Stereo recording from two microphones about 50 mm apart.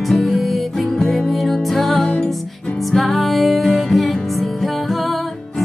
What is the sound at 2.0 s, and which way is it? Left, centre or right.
Music, left.